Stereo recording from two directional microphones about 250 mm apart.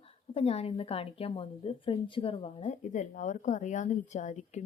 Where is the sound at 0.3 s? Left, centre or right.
Left.